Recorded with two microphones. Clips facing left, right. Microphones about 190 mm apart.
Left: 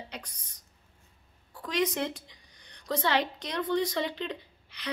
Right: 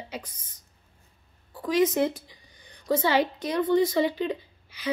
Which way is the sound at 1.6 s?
5° right (ahead or behind).